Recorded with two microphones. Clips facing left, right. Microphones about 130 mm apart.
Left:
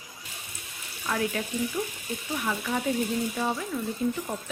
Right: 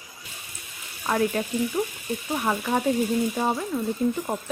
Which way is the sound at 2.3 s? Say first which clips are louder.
Right 5 dB; 45° right (ahead or behind).